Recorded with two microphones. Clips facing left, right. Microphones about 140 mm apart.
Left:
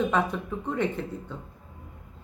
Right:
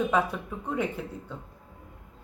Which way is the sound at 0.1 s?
10° right (ahead or behind).